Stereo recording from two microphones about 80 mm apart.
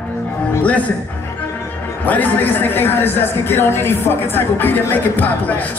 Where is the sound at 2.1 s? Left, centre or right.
Left.